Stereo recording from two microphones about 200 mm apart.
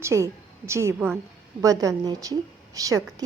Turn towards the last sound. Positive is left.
turn(degrees=-15)  # may be behind; listen again after turning